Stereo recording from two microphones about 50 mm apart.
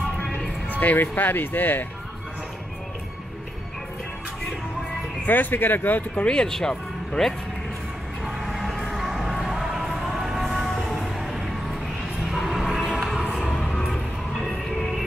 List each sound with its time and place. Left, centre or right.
0.7 s speech: left
5.2 s speech: left
6.1 s speech: centre
8.4 s music: centre
9.4 s a sound: centre
10.3 s music: centre